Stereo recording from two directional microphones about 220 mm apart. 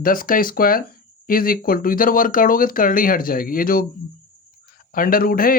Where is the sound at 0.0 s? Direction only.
40° left (ahead or behind).